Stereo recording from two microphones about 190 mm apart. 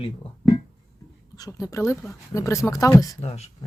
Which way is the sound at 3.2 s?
35° left (ahead or behind).